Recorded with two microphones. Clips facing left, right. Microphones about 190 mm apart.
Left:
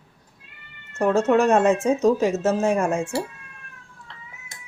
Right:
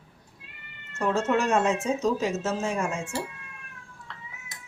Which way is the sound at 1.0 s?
55° left (ahead or behind).